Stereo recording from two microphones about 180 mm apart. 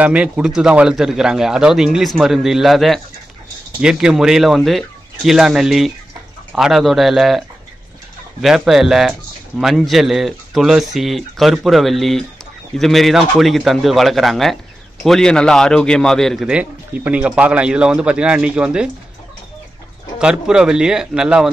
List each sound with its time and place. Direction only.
0.0 s speech: 5° right (ahead or behind)
20.2 s speech: 5° right (ahead or behind)